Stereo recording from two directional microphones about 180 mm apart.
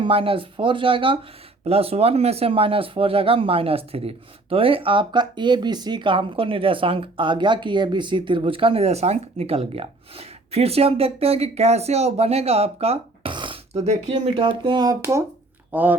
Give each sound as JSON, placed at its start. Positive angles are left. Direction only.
{"t": 0.0, "sound": "speech", "side_deg": -30}